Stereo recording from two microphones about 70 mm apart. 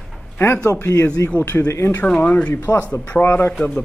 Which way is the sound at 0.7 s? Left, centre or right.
Left.